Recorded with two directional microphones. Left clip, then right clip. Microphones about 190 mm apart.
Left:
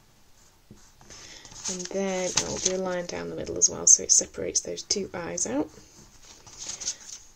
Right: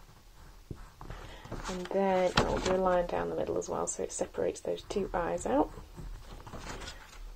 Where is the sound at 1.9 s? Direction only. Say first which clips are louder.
Right 2 dB; 35° left (ahead or behind).